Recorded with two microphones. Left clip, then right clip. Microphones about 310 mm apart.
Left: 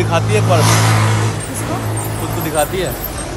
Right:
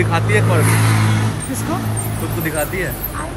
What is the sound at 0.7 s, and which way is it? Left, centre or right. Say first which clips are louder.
Vehicle: left 4 dB; left.